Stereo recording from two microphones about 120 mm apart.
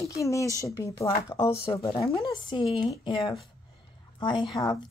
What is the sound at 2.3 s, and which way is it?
A woman's voice, 40° left (ahead or behind).